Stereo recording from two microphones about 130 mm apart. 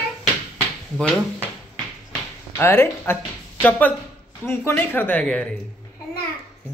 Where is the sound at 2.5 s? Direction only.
20° left (ahead or behind).